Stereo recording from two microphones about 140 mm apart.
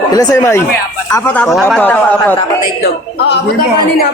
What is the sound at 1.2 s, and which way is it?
Speech, 10° left (ahead or behind).